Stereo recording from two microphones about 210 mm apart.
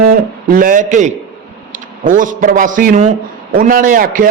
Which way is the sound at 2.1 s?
40° right (ahead or behind).